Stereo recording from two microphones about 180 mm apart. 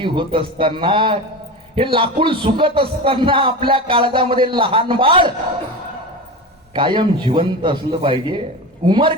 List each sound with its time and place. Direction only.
0.0 s a man's voice: 25° right (ahead or behind)
6.7 s a man's voice: 25° right (ahead or behind)